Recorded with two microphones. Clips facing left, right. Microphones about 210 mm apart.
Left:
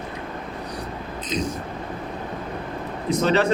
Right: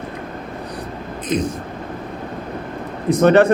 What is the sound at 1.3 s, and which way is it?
Speech, 55° right (ahead or behind).